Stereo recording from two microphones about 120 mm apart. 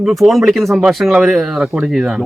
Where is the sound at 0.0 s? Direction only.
Centre (ahead or behind).